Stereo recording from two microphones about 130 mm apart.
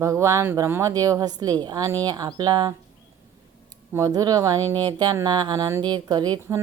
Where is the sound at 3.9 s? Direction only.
25° right (ahead or behind).